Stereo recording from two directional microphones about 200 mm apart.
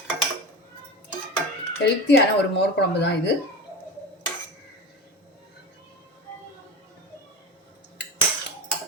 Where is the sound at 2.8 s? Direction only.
55° left (ahead or behind).